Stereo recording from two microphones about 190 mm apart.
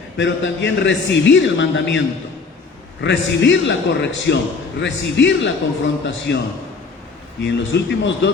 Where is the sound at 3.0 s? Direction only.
70° left (ahead or behind).